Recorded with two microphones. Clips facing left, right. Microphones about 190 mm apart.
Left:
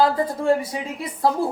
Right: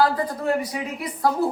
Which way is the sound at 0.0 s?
25° left (ahead or behind).